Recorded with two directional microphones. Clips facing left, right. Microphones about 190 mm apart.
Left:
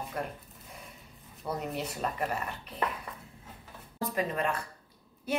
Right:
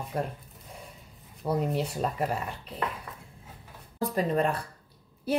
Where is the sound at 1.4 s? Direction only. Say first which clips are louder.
Right 6 dB; 35° right (ahead or behind).